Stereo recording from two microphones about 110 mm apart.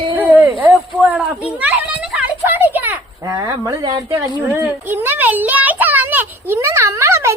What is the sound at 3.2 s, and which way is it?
Speech, 30° right (ahead or behind).